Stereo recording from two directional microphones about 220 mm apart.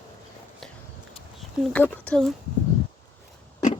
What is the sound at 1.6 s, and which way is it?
Speech, 10° left (ahead or behind).